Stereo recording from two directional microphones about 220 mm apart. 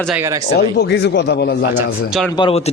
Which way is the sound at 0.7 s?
55° left (ahead or behind).